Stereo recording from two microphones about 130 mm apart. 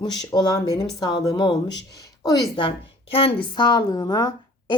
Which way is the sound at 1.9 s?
25° left (ahead or behind).